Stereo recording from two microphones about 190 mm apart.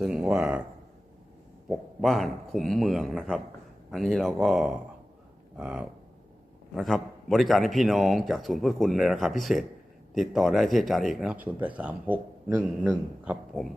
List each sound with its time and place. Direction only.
0.0 s speech: 5° right (ahead or behind)
1.7 s speech: centre (ahead or behind)